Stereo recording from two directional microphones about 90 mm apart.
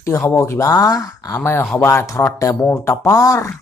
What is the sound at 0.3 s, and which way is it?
Speech, 35° left (ahead or behind).